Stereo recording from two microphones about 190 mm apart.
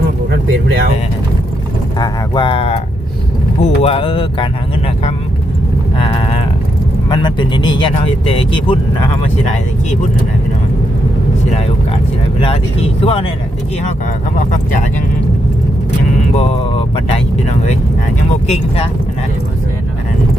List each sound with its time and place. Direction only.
0.3 s vehicle: 65° right (ahead or behind)
2.0 s speech: 25° left (ahead or behind)
6.0 s speech: 30° left (ahead or behind)
12.4 s speech: 30° left (ahead or behind)
16.3 s speech: 30° left (ahead or behind)
18.4 s speech: 35° left (ahead or behind)